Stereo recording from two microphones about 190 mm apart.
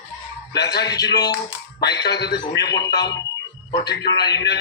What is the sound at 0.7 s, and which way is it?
A man's voice, 60° left (ahead or behind).